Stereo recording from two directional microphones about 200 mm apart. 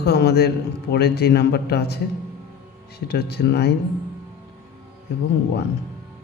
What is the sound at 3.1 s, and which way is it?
Speech, 55° left (ahead or behind).